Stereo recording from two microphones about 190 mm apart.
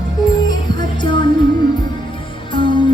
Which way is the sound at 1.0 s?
25° left (ahead or behind).